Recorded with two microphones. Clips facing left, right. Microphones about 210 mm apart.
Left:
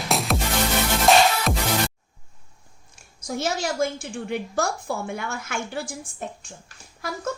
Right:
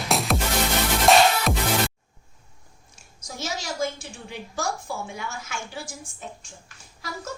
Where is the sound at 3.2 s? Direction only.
60° left (ahead or behind).